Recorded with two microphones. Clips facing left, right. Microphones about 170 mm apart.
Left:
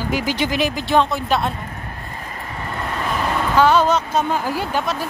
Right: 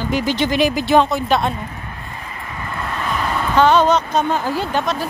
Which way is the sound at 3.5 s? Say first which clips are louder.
Right 2 dB; 5° left (ahead or behind).